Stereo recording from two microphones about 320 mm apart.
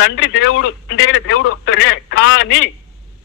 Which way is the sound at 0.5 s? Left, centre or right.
Left.